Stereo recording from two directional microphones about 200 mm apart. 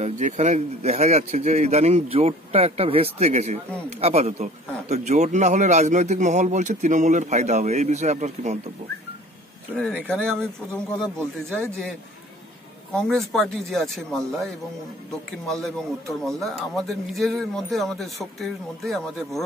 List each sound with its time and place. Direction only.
0.0 s a man's voice: 35° right (ahead or behind)
9.8 s a man's voice: 5° left (ahead or behind)
12.9 s a man's voice: centre (ahead or behind)